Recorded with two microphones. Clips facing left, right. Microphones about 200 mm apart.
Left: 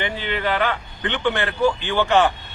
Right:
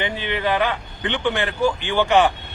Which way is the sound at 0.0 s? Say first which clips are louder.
Right 1 dB; 15° right (ahead or behind).